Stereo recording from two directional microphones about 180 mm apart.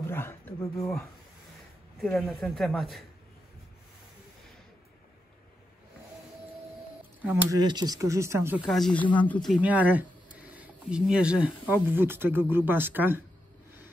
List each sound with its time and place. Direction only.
0.0 s speech: 15° left (ahead or behind)
2.0 s a man's voice: centre (ahead or behind)
7.5 s speech: 20° right (ahead or behind)
8.6 s a man's voice: centre (ahead or behind)
9.6 s speech: 10° right (ahead or behind)
10.4 s a sound: 10° right (ahead or behind)
11.7 s speech: 10° right (ahead or behind)